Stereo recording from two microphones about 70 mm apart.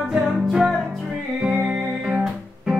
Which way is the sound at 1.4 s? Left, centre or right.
Centre.